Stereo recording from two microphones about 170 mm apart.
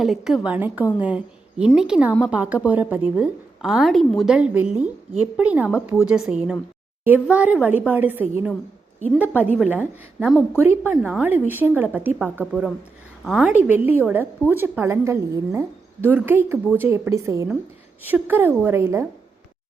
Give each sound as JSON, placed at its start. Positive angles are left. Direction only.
{"t": 0.0, "sound": "a woman's voice", "side_deg": 0}
{"t": 13.5, "sound": "a woman's voice", "side_deg": -10}